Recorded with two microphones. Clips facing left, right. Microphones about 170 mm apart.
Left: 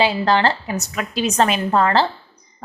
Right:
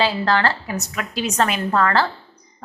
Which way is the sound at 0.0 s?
20° left (ahead or behind).